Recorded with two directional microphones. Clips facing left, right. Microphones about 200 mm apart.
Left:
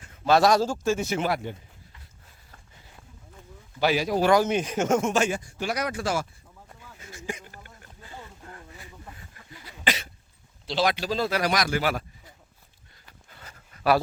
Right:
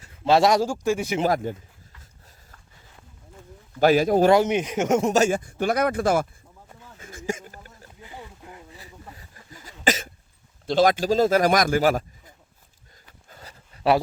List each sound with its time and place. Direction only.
0.3 s speech: 25° right (ahead or behind)
1.2 s a man's voice: 40° right (ahead or behind)
3.8 s a man's voice: 50° right (ahead or behind)
4.3 s a man's voice: 20° right (ahead or behind)
5.0 s speech: 40° right (ahead or behind)
5.5 s a man's voice: 55° right (ahead or behind)
7.1 s a sound: 45° right (ahead or behind)
8.0 s a sound: 15° right (ahead or behind)
9.1 s a sound: 40° right (ahead or behind)
9.8 s cough: 45° right (ahead or behind)
10.7 s a man's voice: 45° right (ahead or behind)
13.2 s a sound: 40° right (ahead or behind)